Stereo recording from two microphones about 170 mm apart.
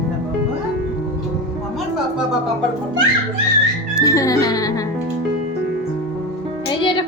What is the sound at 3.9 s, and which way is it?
Music, 20° left (ahead or behind).